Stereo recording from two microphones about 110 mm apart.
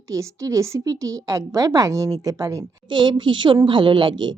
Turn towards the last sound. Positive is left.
turn(degrees=-45)  # may be behind; listen again after turning